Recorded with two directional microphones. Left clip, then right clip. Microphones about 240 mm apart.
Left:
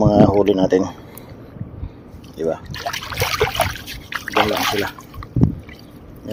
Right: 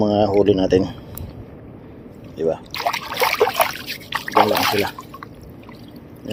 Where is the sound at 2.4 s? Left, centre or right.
Centre.